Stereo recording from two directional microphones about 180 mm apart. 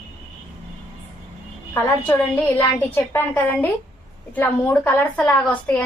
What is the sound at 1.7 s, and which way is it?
A woman's voice, 10° left (ahead or behind).